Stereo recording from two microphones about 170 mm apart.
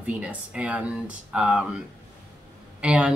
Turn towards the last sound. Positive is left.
turn(degrees=-5)  # may be behind; listen again after turning